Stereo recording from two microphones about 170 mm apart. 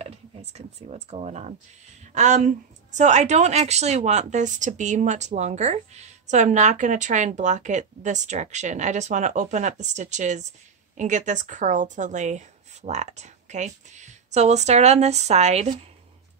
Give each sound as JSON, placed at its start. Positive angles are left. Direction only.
{"t": 0.0, "sound": "a woman's voice", "side_deg": -40}